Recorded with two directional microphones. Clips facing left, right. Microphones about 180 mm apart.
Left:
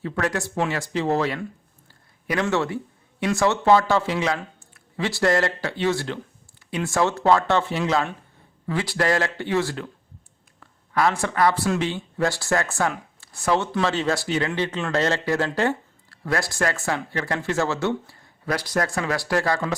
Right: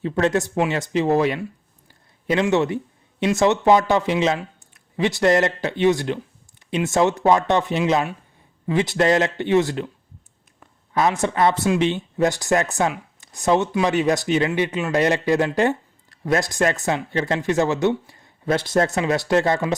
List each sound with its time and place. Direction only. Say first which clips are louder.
0.0 s speech: right 6 dB; 20° right (ahead or behind)